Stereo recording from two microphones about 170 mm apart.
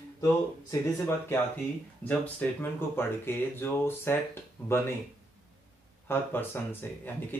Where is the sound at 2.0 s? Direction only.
10° left (ahead or behind).